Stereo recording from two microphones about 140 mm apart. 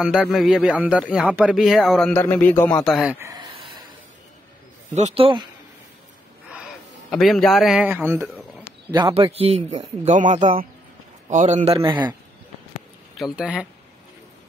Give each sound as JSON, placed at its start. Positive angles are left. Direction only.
{"t": 0.0, "sound": "speech", "side_deg": -5}
{"t": 2.1, "sound": "speech", "side_deg": 15}
{"t": 2.8, "sound": "speech", "side_deg": 0}
{"t": 3.3, "sound": "a sound", "side_deg": -35}
{"t": 4.9, "sound": "a man's voice", "side_deg": -45}
{"t": 7.1, "sound": "speech", "side_deg": 0}
{"t": 7.9, "sound": "speech", "side_deg": -15}
{"t": 9.1, "sound": "speech", "side_deg": -45}
{"t": 13.2, "sound": "speech", "side_deg": -5}